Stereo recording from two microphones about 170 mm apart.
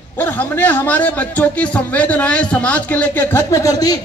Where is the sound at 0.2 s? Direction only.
10° left (ahead or behind).